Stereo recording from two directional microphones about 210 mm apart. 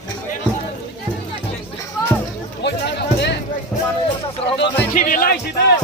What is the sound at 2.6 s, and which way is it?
Music, 55° left (ahead or behind).